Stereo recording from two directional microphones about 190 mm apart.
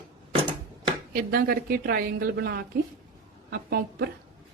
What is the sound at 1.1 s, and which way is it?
A woman's voice, 50° right (ahead or behind).